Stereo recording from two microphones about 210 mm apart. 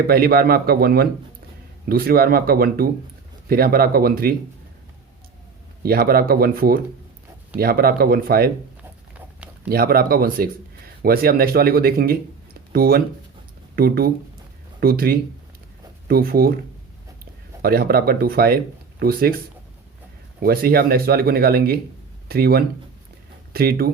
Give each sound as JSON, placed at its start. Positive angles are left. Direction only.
{"t": 0.1, "sound": "speech", "side_deg": -45}
{"t": 5.8, "sound": "speech", "side_deg": -45}
{"t": 9.6, "sound": "speech", "side_deg": -45}
{"t": 17.6, "sound": "speech", "side_deg": -45}
{"t": 20.4, "sound": "speech", "side_deg": -45}